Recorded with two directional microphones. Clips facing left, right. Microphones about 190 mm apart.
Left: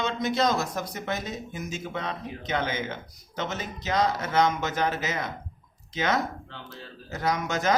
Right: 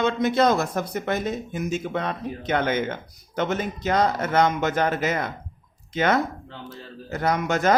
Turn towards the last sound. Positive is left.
turn(degrees=-55)  # may be behind; listen again after turning